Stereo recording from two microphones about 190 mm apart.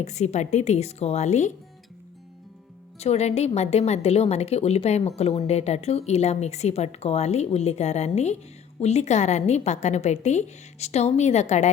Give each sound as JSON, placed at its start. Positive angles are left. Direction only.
{"t": 0.0, "sound": "a woman's voice", "side_deg": 35}
{"t": 3.0, "sound": "a woman's voice", "side_deg": 35}